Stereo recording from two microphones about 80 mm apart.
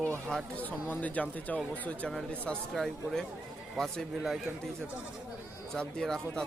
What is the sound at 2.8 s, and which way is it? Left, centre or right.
A man's voice, centre.